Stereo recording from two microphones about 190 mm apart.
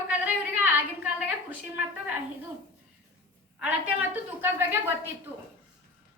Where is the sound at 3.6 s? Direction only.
10° right (ahead or behind).